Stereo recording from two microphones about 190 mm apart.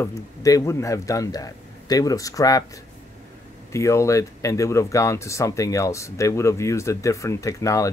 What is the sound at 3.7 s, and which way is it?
Speech, 15° left (ahead or behind).